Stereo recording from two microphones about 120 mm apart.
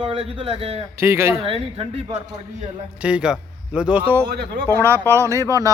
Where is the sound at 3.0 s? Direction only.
10° right (ahead or behind).